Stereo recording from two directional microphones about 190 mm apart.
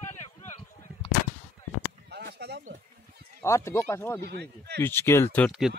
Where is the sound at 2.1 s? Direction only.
60° right (ahead or behind).